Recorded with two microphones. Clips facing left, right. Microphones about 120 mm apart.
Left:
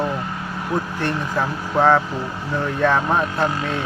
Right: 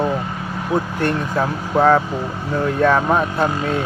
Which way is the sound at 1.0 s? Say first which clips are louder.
Right 3 dB; 50° right (ahead or behind).